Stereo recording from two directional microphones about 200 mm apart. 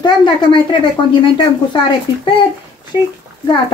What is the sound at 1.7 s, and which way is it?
Speech, 25° left (ahead or behind).